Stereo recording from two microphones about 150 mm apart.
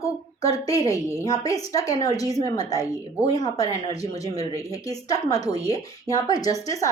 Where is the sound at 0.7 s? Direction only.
20° left (ahead or behind).